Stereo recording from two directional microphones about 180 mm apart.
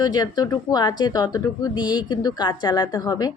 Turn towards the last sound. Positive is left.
turn(degrees=20)  # may be behind; listen again after turning